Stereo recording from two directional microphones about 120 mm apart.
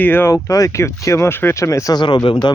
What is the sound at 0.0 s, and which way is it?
Speech, 15° left (ahead or behind).